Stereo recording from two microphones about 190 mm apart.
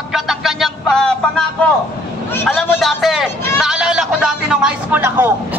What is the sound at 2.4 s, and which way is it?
A man's voice, 10° left (ahead or behind).